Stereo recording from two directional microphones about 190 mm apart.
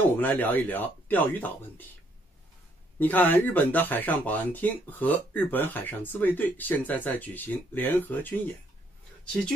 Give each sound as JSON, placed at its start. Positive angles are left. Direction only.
{"t": 0.2, "sound": "speech", "side_deg": 10}
{"t": 3.0, "sound": "speech", "side_deg": 10}